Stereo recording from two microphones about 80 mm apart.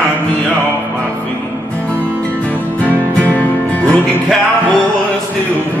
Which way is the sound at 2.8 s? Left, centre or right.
Centre.